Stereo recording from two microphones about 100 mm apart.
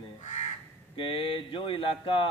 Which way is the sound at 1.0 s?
60° left (ahead or behind).